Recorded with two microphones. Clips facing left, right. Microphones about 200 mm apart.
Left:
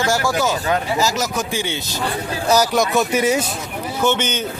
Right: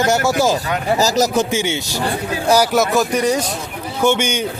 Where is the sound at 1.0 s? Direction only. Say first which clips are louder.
Right 5 dB; 40° right (ahead or behind).